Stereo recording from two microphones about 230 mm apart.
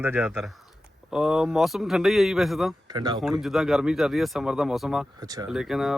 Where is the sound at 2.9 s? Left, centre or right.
Centre.